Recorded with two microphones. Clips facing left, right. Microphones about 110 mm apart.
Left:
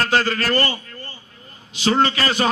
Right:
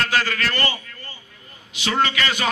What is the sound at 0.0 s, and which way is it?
A man's voice, 35° left (ahead or behind).